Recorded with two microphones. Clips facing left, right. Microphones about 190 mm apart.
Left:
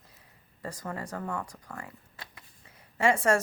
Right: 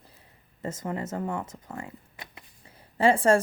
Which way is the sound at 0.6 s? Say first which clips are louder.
Right 5 dB; 20° right (ahead or behind).